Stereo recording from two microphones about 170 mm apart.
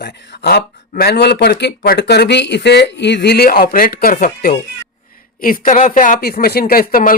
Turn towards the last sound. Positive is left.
turn(degrees=55)  # may be behind; listen again after turning